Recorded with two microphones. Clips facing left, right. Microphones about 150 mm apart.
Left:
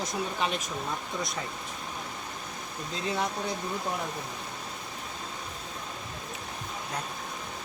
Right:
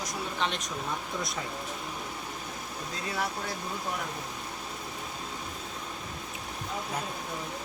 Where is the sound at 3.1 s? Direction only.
20° left (ahead or behind).